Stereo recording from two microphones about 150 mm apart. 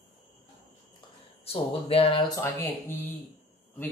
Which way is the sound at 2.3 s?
20° left (ahead or behind).